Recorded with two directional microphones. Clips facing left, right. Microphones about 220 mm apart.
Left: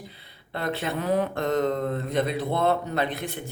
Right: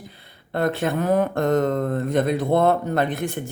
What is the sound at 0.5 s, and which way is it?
Speech, 50° right (ahead or behind).